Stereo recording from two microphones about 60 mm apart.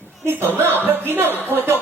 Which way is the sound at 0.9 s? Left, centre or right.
Right.